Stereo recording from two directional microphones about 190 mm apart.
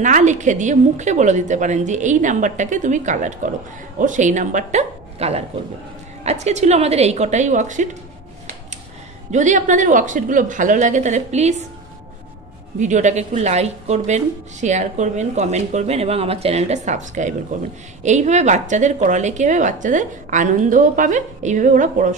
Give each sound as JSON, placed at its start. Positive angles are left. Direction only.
{"t": 0.0, "sound": "a woman's voice", "side_deg": -40}
{"t": 9.3, "sound": "a woman's voice", "side_deg": -40}
{"t": 12.7, "sound": "a woman's voice", "side_deg": -40}